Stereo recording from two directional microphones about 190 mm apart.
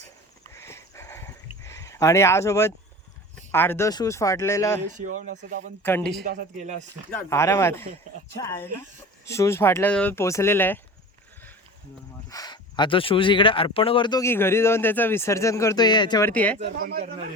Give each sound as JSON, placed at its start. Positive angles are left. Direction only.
{"t": 0.5, "sound": "a sound", "side_deg": 15}
{"t": 3.5, "sound": "speech", "side_deg": 10}
{"t": 4.9, "sound": "a man's voice", "side_deg": -40}
{"t": 5.8, "sound": "a man's voice", "side_deg": 10}
{"t": 6.2, "sound": "a man's voice", "side_deg": -40}
{"t": 7.1, "sound": "speech", "side_deg": 15}
{"t": 12.3, "sound": "speech", "side_deg": 20}
{"t": 16.3, "sound": "speech", "side_deg": 5}